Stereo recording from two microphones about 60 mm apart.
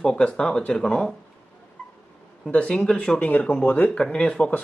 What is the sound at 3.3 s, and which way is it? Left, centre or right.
Speech, left.